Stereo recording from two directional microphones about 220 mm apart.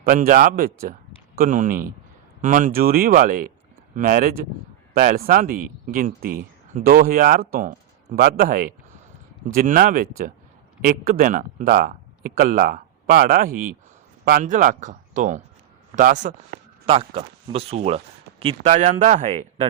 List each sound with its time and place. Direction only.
0.0 s speech: 40° right (ahead or behind)